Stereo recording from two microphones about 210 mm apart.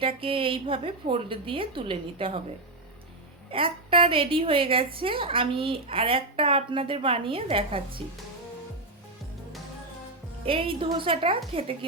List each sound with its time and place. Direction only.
0.0 s a woman's voice: 25° right (ahead or behind)
3.5 s a woman's voice: 25° right (ahead or behind)
10.4 s a woman's voice: 25° right (ahead or behind)